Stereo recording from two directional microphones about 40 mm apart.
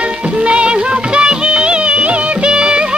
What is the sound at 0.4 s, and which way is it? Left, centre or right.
Music of bollywood, right.